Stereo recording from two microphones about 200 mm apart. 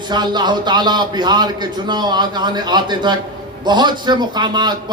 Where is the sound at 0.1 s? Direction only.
20° right (ahead or behind).